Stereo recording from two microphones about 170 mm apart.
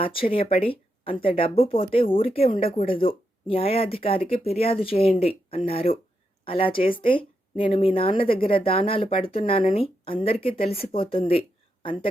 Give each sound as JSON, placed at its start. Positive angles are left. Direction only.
{"t": 0.0, "sound": "a woman's voice", "side_deg": 30}